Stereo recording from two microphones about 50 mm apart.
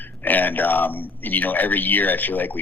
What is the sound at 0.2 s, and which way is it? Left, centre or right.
Speech, left.